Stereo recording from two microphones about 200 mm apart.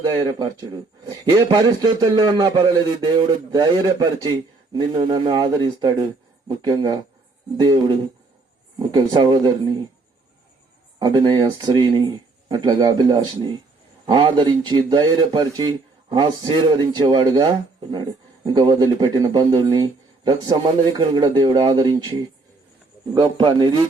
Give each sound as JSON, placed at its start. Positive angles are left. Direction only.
{"t": 0.2, "sound": "a man's voice", "side_deg": -20}
{"t": 11.0, "sound": "a man's voice", "side_deg": -20}
{"t": 23.1, "sound": "a man's voice", "side_deg": -25}